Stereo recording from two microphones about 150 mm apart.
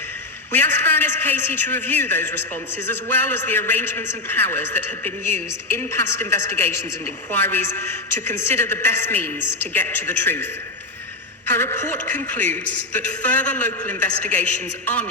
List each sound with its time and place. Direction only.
0.5 s a man's voice: 15° left (ahead or behind)